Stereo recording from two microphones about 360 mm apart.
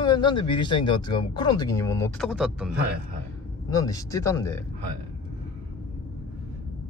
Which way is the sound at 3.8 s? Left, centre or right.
Centre.